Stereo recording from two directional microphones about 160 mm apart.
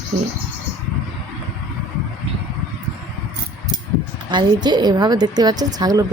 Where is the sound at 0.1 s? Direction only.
45° right (ahead or behind).